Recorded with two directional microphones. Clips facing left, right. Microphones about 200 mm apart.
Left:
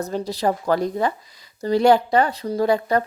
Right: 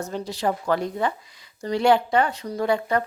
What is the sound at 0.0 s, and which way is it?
A woman's voice, 35° left (ahead or behind).